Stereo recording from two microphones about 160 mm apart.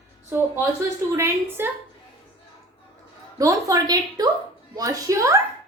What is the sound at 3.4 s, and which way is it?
A woman's voice, 20° right (ahead or behind).